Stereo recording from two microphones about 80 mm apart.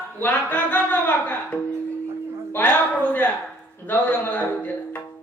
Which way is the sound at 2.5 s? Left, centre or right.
Left.